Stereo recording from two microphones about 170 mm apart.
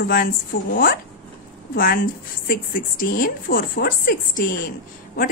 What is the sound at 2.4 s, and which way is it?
A woman's voice, 55° left (ahead or behind).